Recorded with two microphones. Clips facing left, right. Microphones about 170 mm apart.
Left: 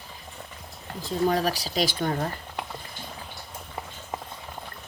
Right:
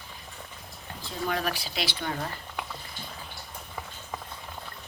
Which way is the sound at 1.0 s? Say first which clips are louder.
Left 6 dB; 35° left (ahead or behind).